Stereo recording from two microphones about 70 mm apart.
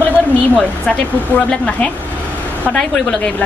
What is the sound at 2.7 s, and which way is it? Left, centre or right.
Speech, centre.